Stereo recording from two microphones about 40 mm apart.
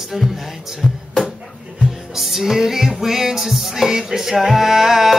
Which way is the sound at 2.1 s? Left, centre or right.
Centre.